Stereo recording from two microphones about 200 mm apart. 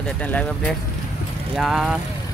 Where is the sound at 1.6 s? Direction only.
Centre (ahead or behind).